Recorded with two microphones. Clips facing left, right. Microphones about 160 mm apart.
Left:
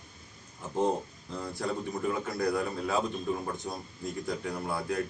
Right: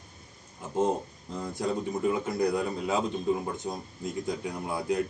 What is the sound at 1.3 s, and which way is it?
A man's voice, 15° right (ahead or behind).